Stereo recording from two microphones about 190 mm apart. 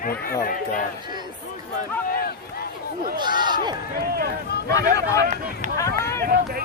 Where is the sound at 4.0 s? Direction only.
55° right (ahead or behind).